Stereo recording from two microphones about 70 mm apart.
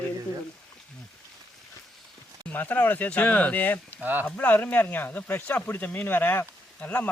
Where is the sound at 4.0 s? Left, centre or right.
Right.